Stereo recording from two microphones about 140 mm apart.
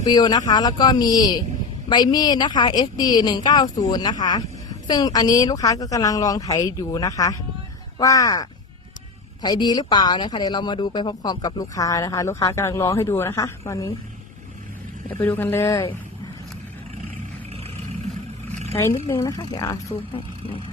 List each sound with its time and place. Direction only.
0.0 s a woman's voice: 30° left (ahead or behind)
15.2 s speech: 15° left (ahead or behind)
18.8 s a woman's voice: 20° left (ahead or behind)
19.9 s speech: 40° left (ahead or behind)